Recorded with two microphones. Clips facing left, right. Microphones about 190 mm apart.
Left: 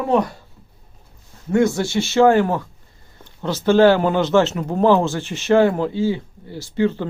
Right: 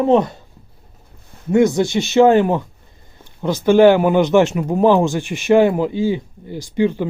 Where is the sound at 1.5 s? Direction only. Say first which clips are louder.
Right 3 dB; 20° right (ahead or behind).